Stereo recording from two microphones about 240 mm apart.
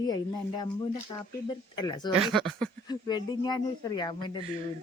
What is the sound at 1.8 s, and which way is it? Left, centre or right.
Speech, centre.